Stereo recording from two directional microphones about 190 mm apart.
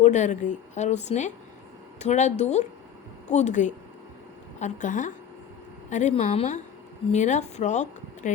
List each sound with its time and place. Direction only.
0.0 s a woman's voice: 40° left (ahead or behind)